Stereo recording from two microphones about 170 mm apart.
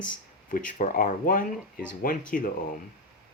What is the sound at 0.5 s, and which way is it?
Speech, 55° left (ahead or behind).